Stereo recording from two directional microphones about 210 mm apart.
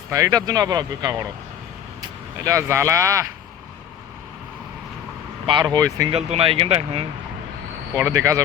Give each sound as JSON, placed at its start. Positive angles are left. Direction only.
{"t": 0.1, "sound": "speech", "side_deg": -15}
{"t": 5.5, "sound": "speech", "side_deg": -20}
{"t": 6.1, "sound": "speech", "side_deg": -30}
{"t": 7.9, "sound": "speech", "side_deg": -15}